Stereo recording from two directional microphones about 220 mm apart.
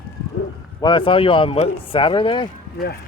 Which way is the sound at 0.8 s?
20° left (ahead or behind).